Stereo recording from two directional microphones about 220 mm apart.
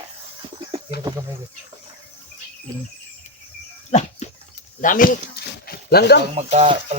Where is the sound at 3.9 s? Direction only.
30° left (ahead or behind).